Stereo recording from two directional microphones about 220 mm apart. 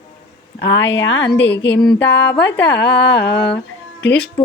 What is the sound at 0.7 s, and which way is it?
Speech, 55° left (ahead or behind).